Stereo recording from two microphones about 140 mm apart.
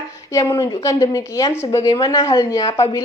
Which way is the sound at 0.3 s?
25° left (ahead or behind).